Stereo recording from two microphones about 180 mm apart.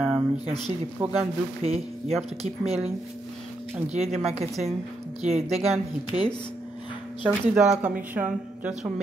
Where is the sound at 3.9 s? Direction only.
35° right (ahead or behind).